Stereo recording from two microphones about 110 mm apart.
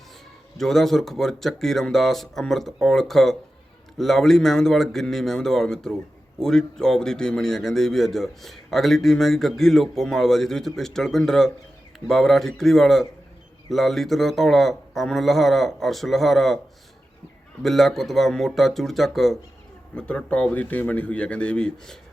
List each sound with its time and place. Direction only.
0.5 s a man's voice: centre (ahead or behind)
17.6 s a man's voice: centre (ahead or behind)